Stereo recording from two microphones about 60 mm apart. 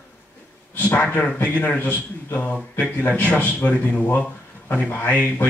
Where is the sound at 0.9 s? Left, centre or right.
Left.